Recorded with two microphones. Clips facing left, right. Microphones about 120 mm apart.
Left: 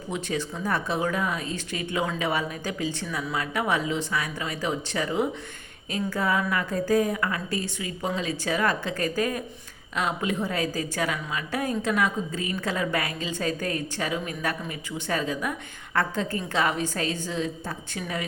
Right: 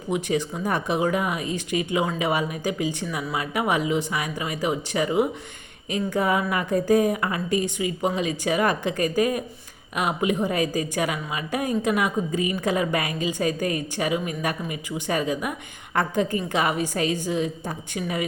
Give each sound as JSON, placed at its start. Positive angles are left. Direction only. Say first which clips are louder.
{"t": 0.1, "sound": "a woman's voice", "louder": "right 5 dB", "side_deg": -15}